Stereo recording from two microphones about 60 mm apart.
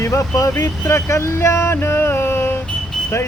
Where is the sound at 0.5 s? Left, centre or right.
Left.